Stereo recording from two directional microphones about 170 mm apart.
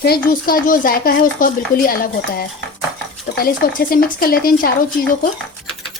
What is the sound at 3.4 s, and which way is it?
Speech, 60° left (ahead or behind).